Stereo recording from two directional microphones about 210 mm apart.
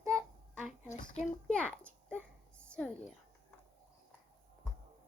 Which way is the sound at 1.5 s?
5° left (ahead or behind).